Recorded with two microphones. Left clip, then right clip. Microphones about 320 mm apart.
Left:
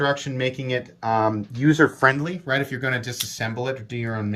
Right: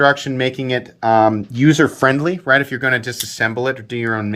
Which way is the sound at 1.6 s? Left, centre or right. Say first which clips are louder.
Right 3 dB; right.